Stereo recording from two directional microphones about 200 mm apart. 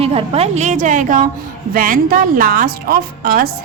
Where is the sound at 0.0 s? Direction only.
30° right (ahead or behind).